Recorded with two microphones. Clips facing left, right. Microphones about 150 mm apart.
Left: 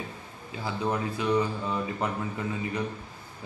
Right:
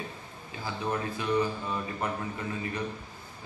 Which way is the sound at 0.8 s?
20° left (ahead or behind).